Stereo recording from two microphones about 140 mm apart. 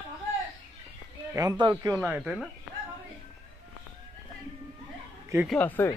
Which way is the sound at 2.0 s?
10° right (ahead or behind).